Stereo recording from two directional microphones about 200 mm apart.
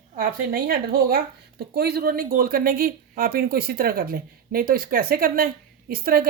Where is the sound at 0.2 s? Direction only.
45° right (ahead or behind).